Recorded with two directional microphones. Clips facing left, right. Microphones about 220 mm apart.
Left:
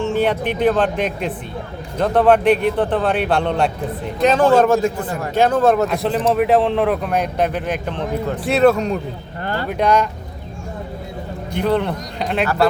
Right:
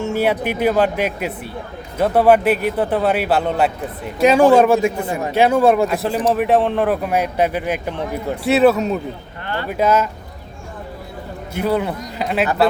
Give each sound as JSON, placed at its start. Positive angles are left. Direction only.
{"t": 0.1, "sound": "a man's voice", "side_deg": -10}
{"t": 9.4, "sound": "a sound", "side_deg": 40}
{"t": 9.6, "sound": "a man's voice", "side_deg": -5}
{"t": 11.5, "sound": "a man's voice", "side_deg": -5}